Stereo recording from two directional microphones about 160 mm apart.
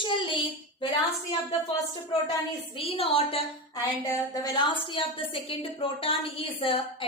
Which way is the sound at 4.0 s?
20° left (ahead or behind).